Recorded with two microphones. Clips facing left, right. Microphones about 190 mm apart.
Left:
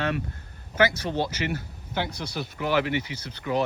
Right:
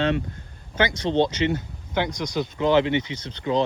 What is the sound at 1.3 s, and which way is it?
Speech, 25° right (ahead or behind).